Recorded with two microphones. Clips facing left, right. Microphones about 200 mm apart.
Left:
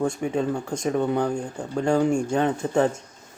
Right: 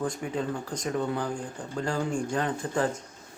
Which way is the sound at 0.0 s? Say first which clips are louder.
Left 6 dB; 25° left (ahead or behind).